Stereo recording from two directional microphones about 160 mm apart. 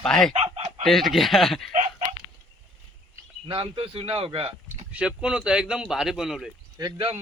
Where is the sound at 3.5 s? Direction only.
35° right (ahead or behind).